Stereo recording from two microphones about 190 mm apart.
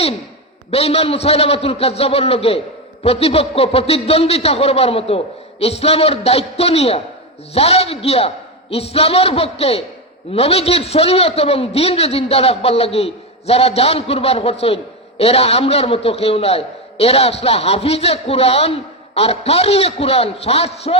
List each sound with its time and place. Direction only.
0.7 s a man's voice: 30° left (ahead or behind)